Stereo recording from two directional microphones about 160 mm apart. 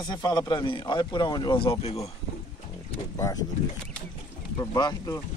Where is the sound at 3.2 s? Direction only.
25° left (ahead or behind).